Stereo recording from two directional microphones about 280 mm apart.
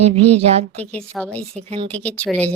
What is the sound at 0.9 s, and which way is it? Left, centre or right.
Speech, centre.